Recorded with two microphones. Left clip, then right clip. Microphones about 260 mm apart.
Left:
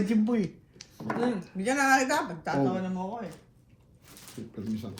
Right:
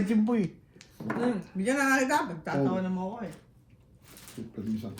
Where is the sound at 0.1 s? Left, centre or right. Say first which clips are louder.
Right 2 dB; right.